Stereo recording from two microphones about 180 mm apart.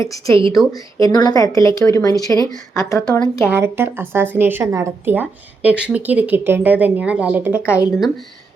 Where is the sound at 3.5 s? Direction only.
10° right (ahead or behind).